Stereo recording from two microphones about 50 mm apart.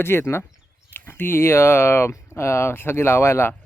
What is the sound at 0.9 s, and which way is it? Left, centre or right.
Speech, left.